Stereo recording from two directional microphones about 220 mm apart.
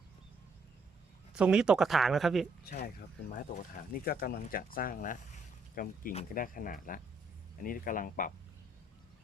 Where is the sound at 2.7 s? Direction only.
35° left (ahead or behind).